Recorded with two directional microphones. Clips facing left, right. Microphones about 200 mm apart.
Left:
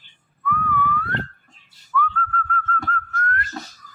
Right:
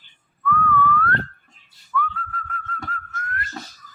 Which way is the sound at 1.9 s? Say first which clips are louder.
Left 3 dB; 5° right (ahead or behind).